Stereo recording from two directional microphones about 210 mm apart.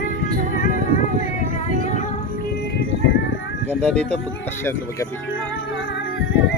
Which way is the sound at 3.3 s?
60° left (ahead or behind).